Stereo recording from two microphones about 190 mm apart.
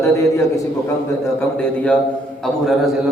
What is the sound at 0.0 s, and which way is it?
A man's voice, 15° left (ahead or behind).